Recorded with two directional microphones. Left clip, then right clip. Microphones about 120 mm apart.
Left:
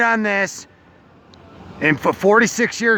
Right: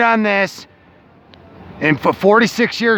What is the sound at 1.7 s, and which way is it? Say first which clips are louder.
Speech: right 2 dB; 15° right (ahead or behind).